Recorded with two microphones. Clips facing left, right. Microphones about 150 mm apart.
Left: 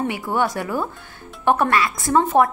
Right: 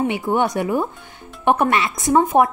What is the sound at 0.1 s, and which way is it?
A woman's voice, 20° right (ahead or behind).